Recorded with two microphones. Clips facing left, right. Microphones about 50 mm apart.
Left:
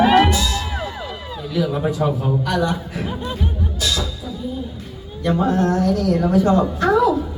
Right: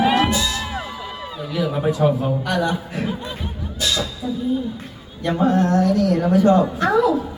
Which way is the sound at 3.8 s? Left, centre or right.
Centre.